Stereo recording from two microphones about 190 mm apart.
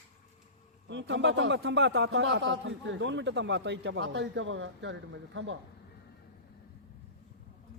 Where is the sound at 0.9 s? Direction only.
70° right (ahead or behind).